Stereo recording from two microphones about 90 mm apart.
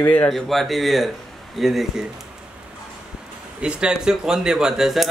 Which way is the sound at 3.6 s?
10° right (ahead or behind).